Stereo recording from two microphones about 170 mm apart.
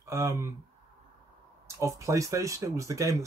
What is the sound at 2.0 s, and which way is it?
Speech, 20° right (ahead or behind).